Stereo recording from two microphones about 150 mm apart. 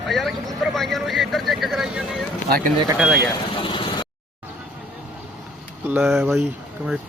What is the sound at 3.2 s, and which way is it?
Speech, 35° left (ahead or behind).